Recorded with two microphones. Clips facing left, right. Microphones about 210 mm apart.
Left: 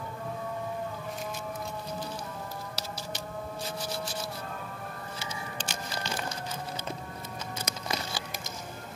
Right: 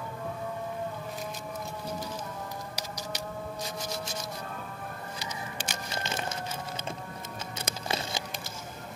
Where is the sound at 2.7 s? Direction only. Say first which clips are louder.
Right 1 dB; 15° right (ahead or behind).